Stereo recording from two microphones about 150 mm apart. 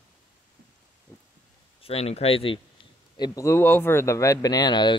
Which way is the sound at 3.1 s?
25° left (ahead or behind).